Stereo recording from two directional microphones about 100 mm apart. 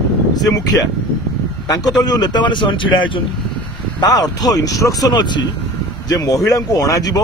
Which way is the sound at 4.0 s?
40° left (ahead or behind).